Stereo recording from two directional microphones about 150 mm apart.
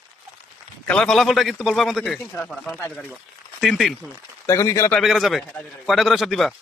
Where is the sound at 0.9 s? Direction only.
5° left (ahead or behind).